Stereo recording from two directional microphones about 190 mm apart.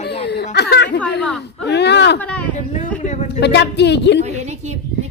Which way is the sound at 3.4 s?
65° left (ahead or behind).